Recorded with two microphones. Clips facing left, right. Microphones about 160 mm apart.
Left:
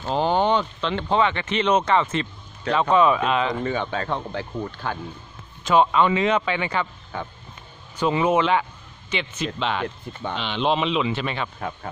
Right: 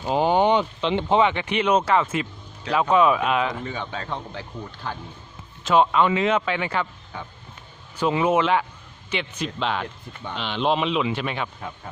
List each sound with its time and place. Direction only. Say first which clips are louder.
0.0 s a man's voice: right 2 dB; 10° right (ahead or behind)
3.6 s speech: left 6 dB; 60° left (ahead or behind)
5.7 s a man's voice: even; centre (ahead or behind)
7.1 s speech: left 5 dB; 55° left (ahead or behind)
8.0 s a man's voice: even; 5° right (ahead or behind)